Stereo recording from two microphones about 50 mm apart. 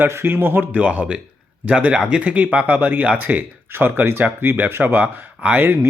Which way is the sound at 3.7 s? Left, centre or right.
Right.